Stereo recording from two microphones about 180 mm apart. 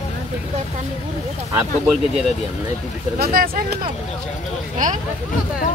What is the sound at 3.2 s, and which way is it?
Speech, 55° right (ahead or behind).